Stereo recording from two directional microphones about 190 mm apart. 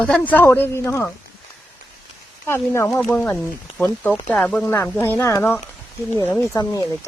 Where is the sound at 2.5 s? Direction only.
15° left (ahead or behind).